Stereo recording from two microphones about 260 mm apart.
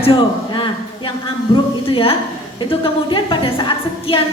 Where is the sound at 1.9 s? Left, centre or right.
Left.